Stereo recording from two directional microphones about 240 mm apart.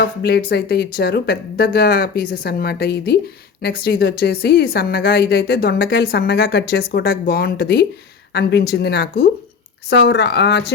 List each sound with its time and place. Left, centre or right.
0.2 s a woman's voice: left